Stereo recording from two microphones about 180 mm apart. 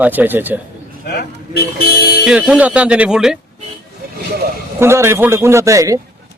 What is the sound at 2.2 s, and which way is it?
A man's voice, 5° right (ahead or behind).